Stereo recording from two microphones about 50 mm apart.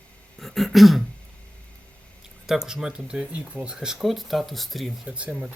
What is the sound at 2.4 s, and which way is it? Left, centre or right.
Speech, centre.